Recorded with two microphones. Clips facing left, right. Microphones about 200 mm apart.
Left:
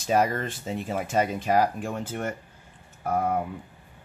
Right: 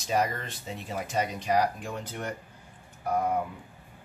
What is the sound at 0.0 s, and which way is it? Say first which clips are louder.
Speech: left 5 dB; 55° left (ahead or behind).